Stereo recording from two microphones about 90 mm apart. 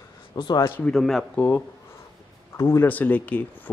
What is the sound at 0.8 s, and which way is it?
Speech, 5° left (ahead or behind).